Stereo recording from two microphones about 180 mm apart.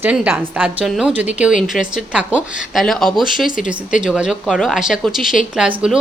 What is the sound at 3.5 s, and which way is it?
Speech, 45° left (ahead or behind).